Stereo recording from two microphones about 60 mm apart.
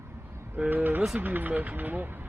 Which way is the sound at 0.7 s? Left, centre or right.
Right.